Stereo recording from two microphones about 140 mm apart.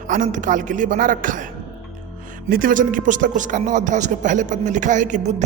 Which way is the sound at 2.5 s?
85° right.